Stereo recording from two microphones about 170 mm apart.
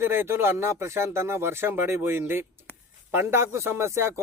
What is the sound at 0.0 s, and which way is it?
Speech, 15° right (ahead or behind).